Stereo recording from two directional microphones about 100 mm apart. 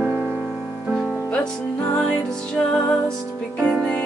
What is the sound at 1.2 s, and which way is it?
Music, 10° left (ahead or behind).